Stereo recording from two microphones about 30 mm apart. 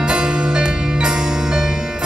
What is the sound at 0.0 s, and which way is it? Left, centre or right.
Music, right.